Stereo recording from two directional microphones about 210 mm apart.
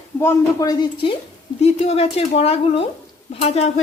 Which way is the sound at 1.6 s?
30° left (ahead or behind).